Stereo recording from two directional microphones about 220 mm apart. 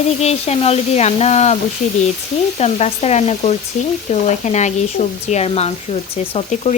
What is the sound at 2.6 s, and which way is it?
Speech, 30° left (ahead or behind).